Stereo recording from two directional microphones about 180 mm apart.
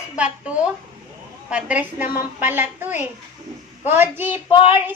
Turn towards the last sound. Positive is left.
turn(degrees=30)  # may be behind; listen again after turning